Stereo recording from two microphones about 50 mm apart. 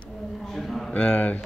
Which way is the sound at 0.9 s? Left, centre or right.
Left.